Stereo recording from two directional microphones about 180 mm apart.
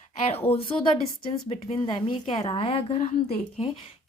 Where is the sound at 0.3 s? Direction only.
35° left (ahead or behind).